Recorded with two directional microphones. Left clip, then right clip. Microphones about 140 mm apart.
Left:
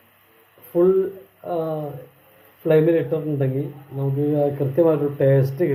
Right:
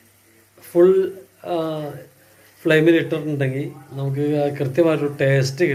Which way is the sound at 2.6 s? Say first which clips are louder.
Right 2 dB; 15° right (ahead or behind).